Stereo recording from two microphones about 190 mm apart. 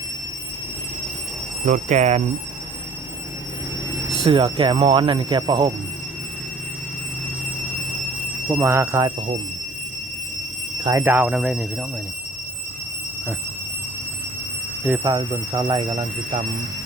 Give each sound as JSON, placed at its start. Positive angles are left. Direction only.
{"t": 1.6, "sound": "speech", "side_deg": -40}
{"t": 4.2, "sound": "speech", "side_deg": -25}
{"t": 8.4, "sound": "speech", "side_deg": -20}
{"t": 10.8, "sound": "a man's voice", "side_deg": -15}
{"t": 15.0, "sound": "speech", "side_deg": -20}